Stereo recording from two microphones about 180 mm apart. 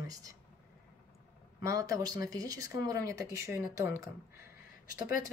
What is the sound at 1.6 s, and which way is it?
Speech, 20° right (ahead or behind).